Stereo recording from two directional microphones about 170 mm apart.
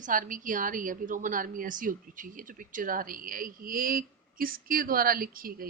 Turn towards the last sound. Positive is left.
turn(degrees=-55)  # may be behind; listen again after turning